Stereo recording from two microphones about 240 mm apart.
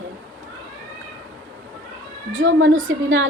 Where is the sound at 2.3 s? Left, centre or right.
Right.